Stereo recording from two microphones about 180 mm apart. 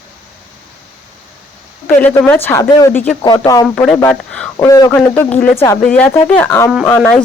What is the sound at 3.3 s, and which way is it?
Speech, 20° left (ahead or behind).